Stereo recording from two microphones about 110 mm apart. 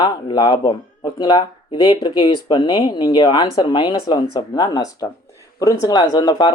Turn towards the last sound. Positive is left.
turn(degrees=45)  # may be behind; listen again after turning